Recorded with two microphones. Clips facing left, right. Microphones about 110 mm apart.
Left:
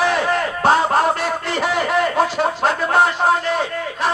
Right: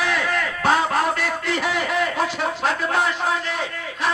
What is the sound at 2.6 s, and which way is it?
A man's voice, 35° left (ahead or behind).